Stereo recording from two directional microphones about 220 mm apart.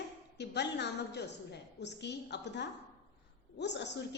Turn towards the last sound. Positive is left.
turn(degrees=50)  # may be behind; listen again after turning